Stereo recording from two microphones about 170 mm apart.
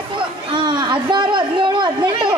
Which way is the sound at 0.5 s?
25° right (ahead or behind).